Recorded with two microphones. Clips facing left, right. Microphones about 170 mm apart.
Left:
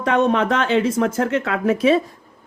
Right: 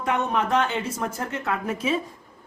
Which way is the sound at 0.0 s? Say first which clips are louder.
Left 7 dB; 90° left.